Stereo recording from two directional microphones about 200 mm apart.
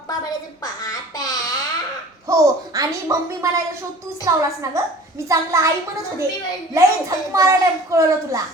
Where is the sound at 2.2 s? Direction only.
15° right (ahead or behind).